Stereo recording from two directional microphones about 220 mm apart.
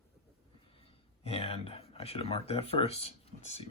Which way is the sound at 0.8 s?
25° left (ahead or behind).